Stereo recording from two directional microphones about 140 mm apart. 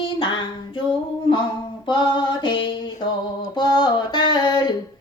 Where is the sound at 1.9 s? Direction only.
35° left (ahead or behind).